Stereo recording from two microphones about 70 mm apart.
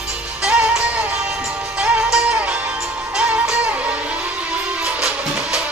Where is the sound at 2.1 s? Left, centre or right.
Centre.